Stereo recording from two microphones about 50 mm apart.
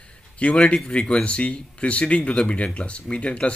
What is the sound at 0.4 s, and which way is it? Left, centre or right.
Speech, left.